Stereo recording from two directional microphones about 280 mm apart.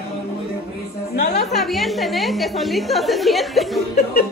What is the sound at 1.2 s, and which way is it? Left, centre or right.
Speech, left.